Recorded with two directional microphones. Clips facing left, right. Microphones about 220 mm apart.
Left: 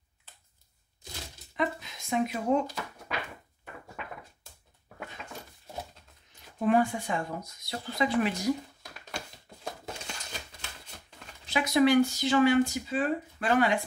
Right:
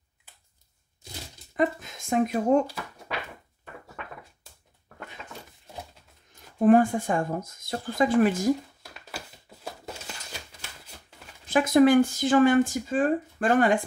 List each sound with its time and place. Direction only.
1.6 s speech: 50° right (ahead or behind)
6.6 s speech: 50° right (ahead or behind)
9.5 s a sound: 5° right (ahead or behind)
11.4 s speech: 50° right (ahead or behind)